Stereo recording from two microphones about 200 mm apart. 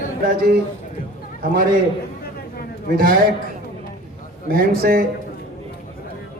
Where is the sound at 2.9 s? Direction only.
45° right (ahead or behind).